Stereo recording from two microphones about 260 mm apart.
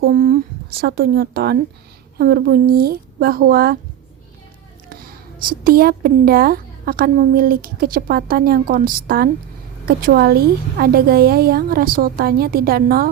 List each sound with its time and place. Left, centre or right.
0.0 s a woman's voice: right
4.9 s a woman's voice: right